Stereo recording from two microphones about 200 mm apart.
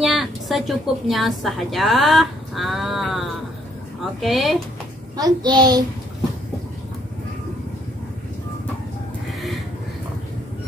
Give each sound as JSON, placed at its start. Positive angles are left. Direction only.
{"t": 0.0, "sound": "a woman's voice", "side_deg": 0}
{"t": 5.1, "sound": "a child's voice", "side_deg": -20}